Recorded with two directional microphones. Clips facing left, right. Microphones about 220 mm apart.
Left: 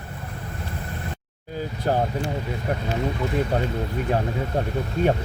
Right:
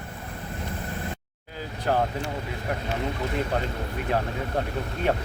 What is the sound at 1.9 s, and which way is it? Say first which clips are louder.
Speech: left 1 dB; 35° left (ahead or behind).